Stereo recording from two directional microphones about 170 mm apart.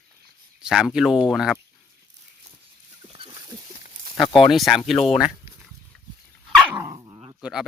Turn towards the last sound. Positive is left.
turn(degrees=-5)  # may be behind; listen again after turning